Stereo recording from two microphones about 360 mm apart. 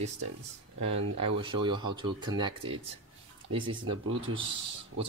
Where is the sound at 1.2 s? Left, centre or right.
Centre.